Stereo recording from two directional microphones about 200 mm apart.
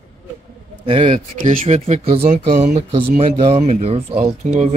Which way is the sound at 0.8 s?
30° right (ahead or behind).